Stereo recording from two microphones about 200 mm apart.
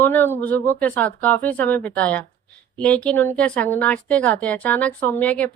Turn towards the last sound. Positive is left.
turn(degrees=5)  # may be behind; listen again after turning